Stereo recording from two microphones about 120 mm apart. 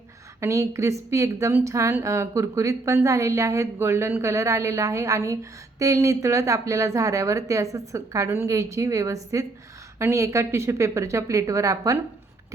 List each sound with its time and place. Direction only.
0.3 s a woman's voice: 25° right (ahead or behind)